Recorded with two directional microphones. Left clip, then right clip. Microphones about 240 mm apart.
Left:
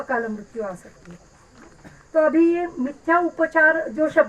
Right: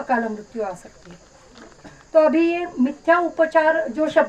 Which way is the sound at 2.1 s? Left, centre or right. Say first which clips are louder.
Right 1 dB; right.